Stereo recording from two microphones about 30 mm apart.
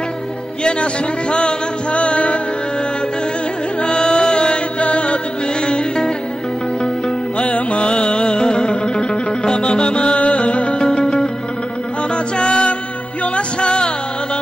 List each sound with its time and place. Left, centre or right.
1.3 s music: left
3.8 s music: left
4.7 s music: left
5.7 s music: left
7.3 s music: left
11.0 s music: left
12.4 s music: left